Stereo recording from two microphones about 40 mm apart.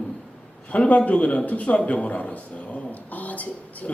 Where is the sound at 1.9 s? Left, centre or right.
Left.